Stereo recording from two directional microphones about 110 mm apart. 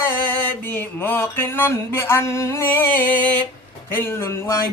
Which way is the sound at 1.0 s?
20° left (ahead or behind).